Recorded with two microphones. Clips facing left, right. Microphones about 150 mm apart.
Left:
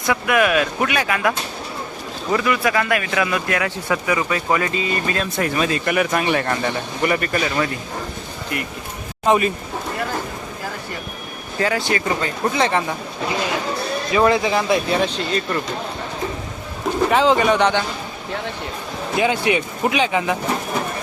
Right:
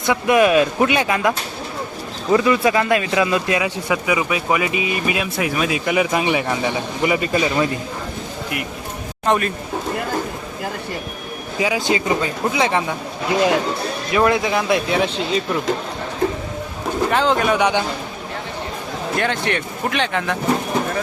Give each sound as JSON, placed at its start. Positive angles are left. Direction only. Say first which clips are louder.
{"t": 0.1, "sound": "speech", "louder": "right 3 dB", "side_deg": -25}
{"t": 2.3, "sound": "speech", "louder": "right 4 dB", "side_deg": -25}
{"t": 9.2, "sound": "speech", "louder": "left 2 dB", "side_deg": 5}
{"t": 11.5, "sound": "speech", "louder": "right 1 dB", "side_deg": -10}
{"t": 14.1, "sound": "speech", "louder": "even", "side_deg": 0}
{"t": 17.1, "sound": "speech", "louder": "left 2 dB", "side_deg": 0}
{"t": 19.1, "sound": "speech", "louder": "left 3 dB", "side_deg": 5}